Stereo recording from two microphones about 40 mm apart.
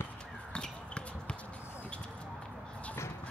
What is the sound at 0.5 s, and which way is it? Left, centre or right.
Basketball bounce, left.